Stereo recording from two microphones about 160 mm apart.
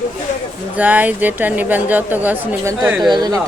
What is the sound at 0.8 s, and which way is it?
Speech, 10° right (ahead or behind).